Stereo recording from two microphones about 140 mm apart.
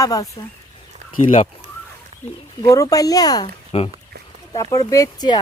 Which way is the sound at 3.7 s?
40° left (ahead or behind).